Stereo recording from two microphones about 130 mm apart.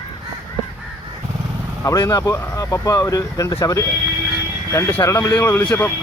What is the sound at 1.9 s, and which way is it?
Speech, 25° left (ahead or behind).